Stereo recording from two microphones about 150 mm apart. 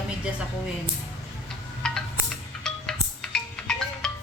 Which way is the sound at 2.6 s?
5° left (ahead or behind).